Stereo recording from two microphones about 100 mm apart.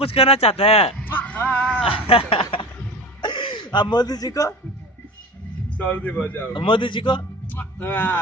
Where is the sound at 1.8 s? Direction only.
70° left (ahead or behind).